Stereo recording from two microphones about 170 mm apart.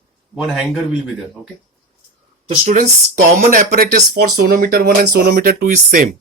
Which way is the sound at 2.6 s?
45° right (ahead or behind).